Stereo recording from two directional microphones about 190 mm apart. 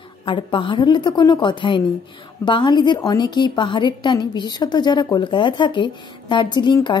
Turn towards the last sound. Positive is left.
turn(degrees=25)  # may be behind; listen again after turning